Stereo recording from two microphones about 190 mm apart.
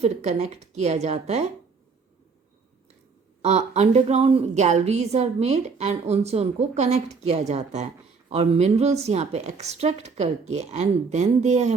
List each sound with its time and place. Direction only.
0.0 s a woman's voice: 35° right (ahead or behind)
3.4 s a woman's voice: 35° right (ahead or behind)